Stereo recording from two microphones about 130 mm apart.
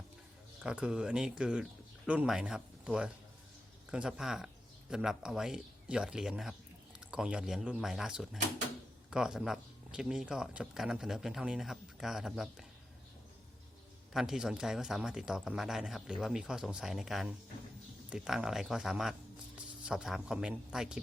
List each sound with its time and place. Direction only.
0.6 s speech: 5° right (ahead or behind)
14.1 s a man's voice: centre (ahead or behind)